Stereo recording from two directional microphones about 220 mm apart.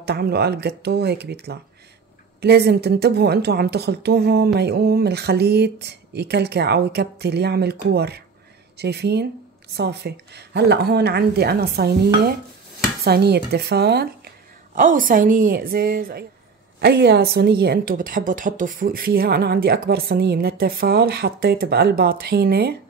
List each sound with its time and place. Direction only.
0.0 s a woman's voice: 45° right (ahead or behind)
14.8 s a woman's voice: 35° right (ahead or behind)